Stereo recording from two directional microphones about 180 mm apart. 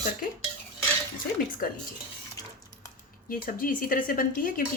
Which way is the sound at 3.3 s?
50° left (ahead or behind).